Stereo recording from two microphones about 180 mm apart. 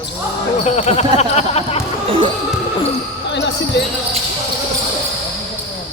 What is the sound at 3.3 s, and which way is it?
Basketball bounce, 75° left (ahead or behind).